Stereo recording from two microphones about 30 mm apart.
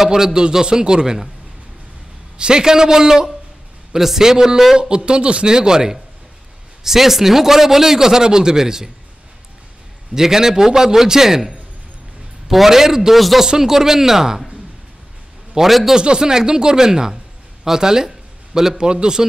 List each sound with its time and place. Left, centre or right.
0.0 s a man's voice: centre
2.3 s a man's voice: right
3.9 s a man's voice: centre
4.2 s a man's voice: centre
4.7 s a man's voice: right
5.5 s a man's voice: right
10.1 s a man's voice: centre
15.5 s a man's voice: right
18.8 s a man's voice: right